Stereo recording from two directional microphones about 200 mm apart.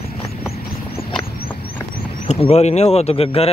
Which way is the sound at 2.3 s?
30° left (ahead or behind).